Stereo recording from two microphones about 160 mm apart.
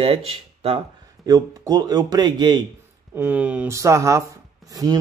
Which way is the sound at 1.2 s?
25° right (ahead or behind).